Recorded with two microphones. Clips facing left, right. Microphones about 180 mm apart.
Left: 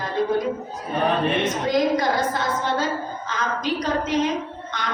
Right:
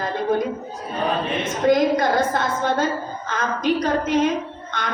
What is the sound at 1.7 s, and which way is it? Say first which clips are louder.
A woman's voice: right 5 dB; 55° right (ahead or behind).